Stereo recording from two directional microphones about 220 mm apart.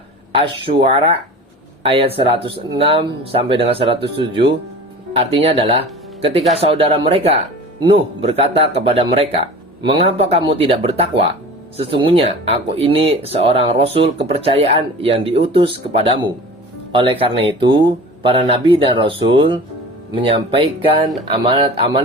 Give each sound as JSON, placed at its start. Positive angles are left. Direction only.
{"t": 0.3, "sound": "speech", "side_deg": -25}